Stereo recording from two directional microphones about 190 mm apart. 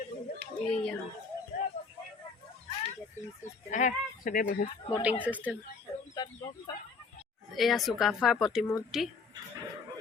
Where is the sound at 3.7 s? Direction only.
40° left (ahead or behind).